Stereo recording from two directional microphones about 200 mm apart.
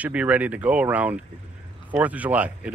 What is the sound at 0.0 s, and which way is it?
Speech, 5° right (ahead or behind).